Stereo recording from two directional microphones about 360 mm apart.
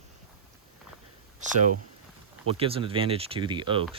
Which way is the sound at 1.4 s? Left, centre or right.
Centre.